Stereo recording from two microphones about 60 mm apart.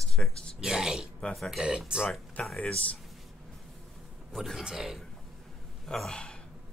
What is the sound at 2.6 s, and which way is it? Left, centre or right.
Speech, left.